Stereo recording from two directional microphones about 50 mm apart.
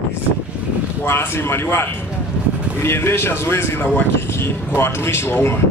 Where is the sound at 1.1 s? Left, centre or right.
Left.